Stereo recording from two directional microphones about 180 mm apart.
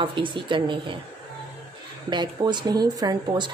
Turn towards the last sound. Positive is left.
turn(degrees=-25)  # may be behind; listen again after turning